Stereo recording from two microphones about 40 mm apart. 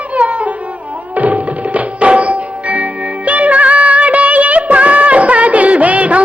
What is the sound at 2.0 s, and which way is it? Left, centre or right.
Music, right.